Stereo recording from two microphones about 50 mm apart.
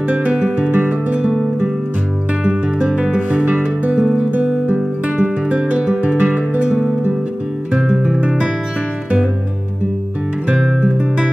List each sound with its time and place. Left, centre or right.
0.1 s music: right
3.0 s music: right
4.6 s music: right
7.7 s music: centre
10.5 s music: centre